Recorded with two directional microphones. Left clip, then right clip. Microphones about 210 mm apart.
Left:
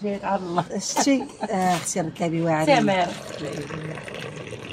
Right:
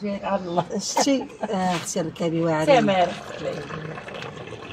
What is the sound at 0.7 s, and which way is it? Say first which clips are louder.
A woman's voice: even; 20° left (ahead or behind).